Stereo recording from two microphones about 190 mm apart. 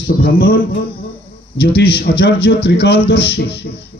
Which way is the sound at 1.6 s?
55° left (ahead or behind).